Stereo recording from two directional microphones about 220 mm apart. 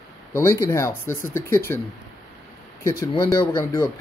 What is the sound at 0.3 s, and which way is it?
Speech, 10° left (ahead or behind).